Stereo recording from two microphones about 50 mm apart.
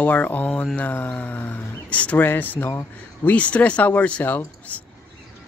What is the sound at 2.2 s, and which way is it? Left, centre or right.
Speech, left.